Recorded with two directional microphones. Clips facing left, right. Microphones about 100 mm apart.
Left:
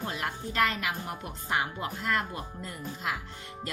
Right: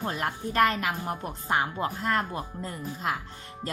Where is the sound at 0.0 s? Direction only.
45° right (ahead or behind).